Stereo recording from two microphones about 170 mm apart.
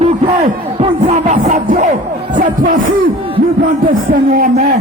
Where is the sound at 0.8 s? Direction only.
40° right (ahead or behind).